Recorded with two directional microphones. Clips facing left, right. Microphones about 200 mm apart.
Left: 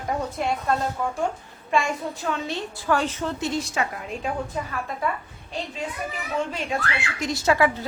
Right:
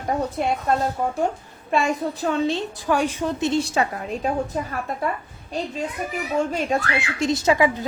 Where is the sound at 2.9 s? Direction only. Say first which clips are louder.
Right 2 dB; 15° right (ahead or behind); by 4.3 s 35° right (ahead or behind).